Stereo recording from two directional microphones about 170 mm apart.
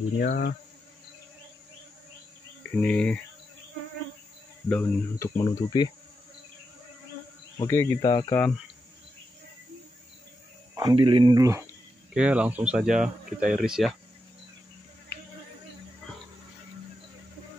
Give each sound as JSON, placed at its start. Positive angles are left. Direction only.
{"t": 0.2, "sound": "insect", "side_deg": 70}
{"t": 2.6, "sound": "insect", "side_deg": 10}
{"t": 4.6, "sound": "speech", "side_deg": 10}
{"t": 5.4, "sound": "speech", "side_deg": 25}
{"t": 7.5, "sound": "speech", "side_deg": 15}
{"t": 10.8, "sound": "speech", "side_deg": -25}
{"t": 12.1, "sound": "speech", "side_deg": -5}